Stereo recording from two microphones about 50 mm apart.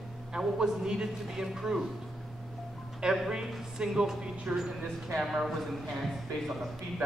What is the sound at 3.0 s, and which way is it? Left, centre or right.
A man's voice, centre.